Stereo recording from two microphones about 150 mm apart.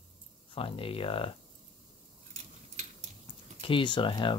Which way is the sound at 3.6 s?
35° left (ahead or behind).